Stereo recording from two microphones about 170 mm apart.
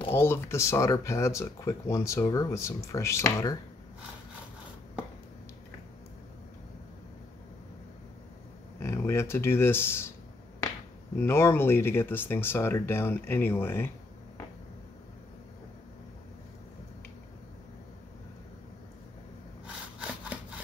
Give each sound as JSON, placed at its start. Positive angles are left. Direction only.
{"t": 0.1, "sound": "speech", "side_deg": 15}
{"t": 8.7, "sound": "speech", "side_deg": 15}
{"t": 11.1, "sound": "speech", "side_deg": 15}